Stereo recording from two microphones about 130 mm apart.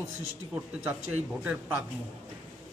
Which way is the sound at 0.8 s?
10° right (ahead or behind).